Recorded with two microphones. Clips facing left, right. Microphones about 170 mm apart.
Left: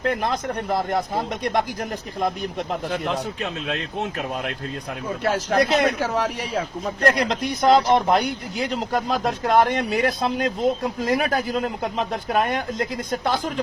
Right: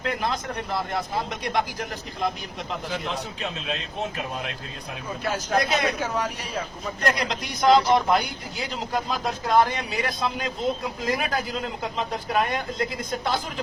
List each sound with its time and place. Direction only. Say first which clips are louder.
0.0 s speech: left 4 dB; 50° left (ahead or behind)
5.2 s a man's voice: left 4 dB; 70° left (ahead or behind); by 8.2 s 45° left (ahead or behind)
8.9 s a man's voice: left 2 dB; 55° left (ahead or behind)